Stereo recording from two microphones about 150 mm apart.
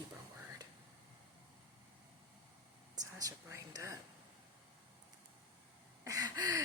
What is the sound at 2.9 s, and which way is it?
Speech, 25° right (ahead or behind).